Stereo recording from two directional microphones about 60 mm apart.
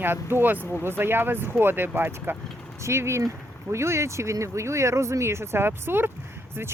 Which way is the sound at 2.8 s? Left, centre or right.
Right.